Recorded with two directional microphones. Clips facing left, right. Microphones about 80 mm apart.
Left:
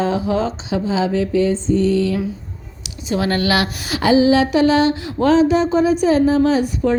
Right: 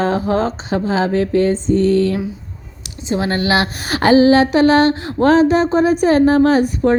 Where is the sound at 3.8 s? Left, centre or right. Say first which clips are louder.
Right 3 dB; right.